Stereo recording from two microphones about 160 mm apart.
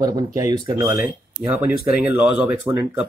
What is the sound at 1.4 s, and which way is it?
Speech, 10° right (ahead or behind).